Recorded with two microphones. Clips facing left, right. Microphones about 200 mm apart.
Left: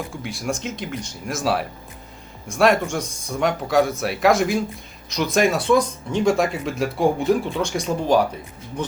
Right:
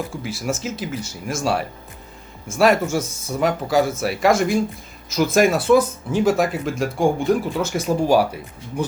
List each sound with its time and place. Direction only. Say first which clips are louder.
0.2 s speech: right 1 dB; centre (ahead or behind)